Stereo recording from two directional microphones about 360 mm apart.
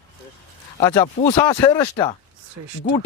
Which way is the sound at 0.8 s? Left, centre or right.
Centre.